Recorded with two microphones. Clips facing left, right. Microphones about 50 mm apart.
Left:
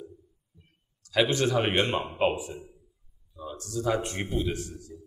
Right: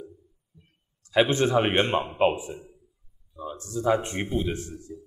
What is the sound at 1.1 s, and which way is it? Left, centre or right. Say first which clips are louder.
Speech: right 3 dB; right.